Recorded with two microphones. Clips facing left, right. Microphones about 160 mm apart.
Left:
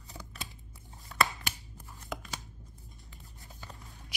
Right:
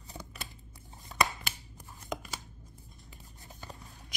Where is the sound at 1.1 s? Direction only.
20° right (ahead or behind).